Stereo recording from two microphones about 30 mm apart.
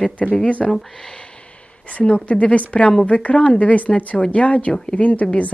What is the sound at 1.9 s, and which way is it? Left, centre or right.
A woman's voice, left.